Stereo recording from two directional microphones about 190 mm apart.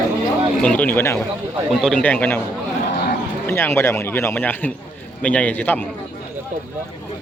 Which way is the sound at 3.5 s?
15° left (ahead or behind).